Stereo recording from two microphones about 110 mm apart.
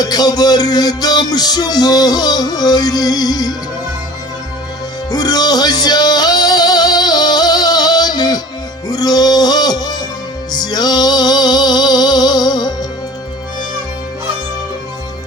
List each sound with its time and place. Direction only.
0.0 s music: 35° left (ahead or behind)
5.1 s music: 35° left (ahead or behind)